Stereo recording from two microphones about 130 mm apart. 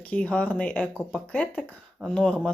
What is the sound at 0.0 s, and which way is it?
Speech, 10° left (ahead or behind).